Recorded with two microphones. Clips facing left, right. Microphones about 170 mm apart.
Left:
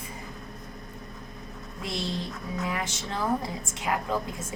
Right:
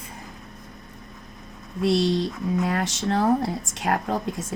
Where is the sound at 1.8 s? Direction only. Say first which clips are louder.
Right 12 dB; 90° right; by 4.0 s 75° right (ahead or behind).